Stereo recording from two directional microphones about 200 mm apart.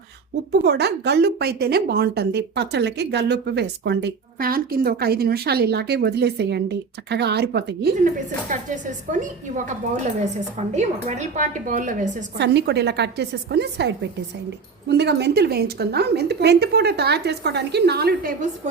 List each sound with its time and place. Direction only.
0.6 s a woman's voice: 55° right (ahead or behind); by 9.6 s 40° right (ahead or behind)
10.8 s a woman's voice: 35° right (ahead or behind)
12.4 s a woman's voice: 55° right (ahead or behind)